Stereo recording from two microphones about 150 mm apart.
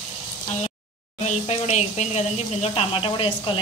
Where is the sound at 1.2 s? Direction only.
50° left (ahead or behind).